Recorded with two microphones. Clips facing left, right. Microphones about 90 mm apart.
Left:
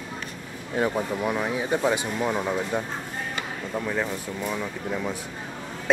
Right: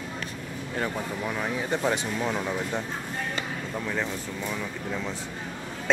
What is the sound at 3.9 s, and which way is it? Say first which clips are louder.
Speech: left 2 dB; 10° left (ahead or behind).